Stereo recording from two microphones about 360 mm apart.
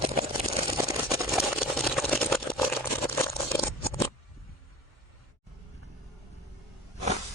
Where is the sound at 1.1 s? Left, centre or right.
Centre.